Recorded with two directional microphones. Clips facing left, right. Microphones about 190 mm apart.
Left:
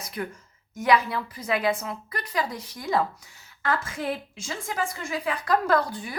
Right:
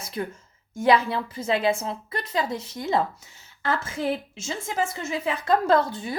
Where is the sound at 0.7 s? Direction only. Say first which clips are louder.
Right 2 dB; 25° right (ahead or behind).